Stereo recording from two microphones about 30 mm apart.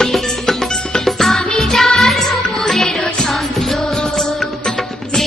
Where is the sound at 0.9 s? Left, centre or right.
Centre.